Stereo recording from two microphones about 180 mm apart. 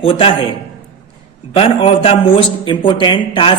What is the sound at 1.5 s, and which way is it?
Speech, 30° left (ahead or behind).